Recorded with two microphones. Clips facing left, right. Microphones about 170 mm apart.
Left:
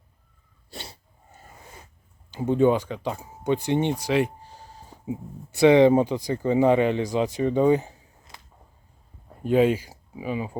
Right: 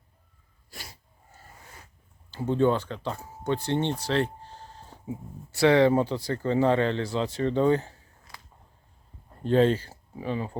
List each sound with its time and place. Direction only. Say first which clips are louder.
0.7 s sneeze: left 5 dB; 30° left (ahead or behind)
2.3 s speech: left 3 dB; 15° left (ahead or behind)
9.4 s speech: left 2 dB; 10° left (ahead or behind)